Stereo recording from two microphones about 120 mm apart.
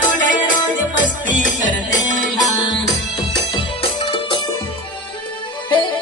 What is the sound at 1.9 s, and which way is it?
Music, 35° left (ahead or behind).